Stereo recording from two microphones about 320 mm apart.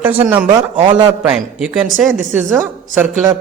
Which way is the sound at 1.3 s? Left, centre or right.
Centre.